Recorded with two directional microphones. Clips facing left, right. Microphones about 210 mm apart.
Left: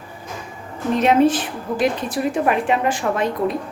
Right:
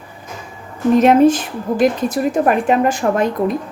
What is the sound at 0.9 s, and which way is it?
Speech, 45° right (ahead or behind).